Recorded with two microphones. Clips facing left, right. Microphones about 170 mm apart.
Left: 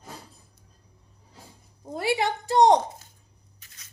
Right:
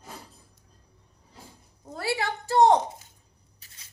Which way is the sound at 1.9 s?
15° left (ahead or behind).